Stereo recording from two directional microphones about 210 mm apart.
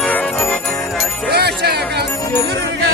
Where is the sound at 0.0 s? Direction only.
10° left (ahead or behind).